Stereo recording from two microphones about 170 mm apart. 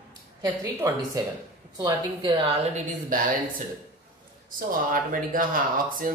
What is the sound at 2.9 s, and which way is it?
Speech, 50° right (ahead or behind).